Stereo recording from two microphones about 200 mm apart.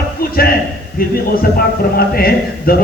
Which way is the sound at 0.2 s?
45° left (ahead or behind).